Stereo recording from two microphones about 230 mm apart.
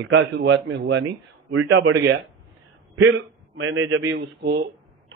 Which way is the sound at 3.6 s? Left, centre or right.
Right.